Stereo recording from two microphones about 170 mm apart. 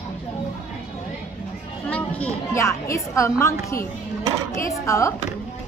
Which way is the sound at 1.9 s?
10° left (ahead or behind).